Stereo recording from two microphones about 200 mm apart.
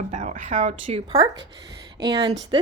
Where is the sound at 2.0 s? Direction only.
20° right (ahead or behind).